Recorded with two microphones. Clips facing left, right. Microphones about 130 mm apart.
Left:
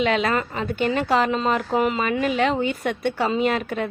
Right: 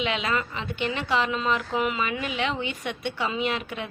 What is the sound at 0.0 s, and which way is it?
A woman's voice, 45° left (ahead or behind).